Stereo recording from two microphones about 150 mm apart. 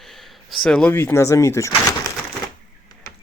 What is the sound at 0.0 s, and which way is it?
Speech, centre (ahead or behind).